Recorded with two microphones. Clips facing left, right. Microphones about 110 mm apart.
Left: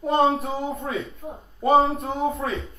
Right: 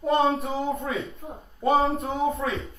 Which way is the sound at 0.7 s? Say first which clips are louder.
Left 1 dB; centre (ahead or behind).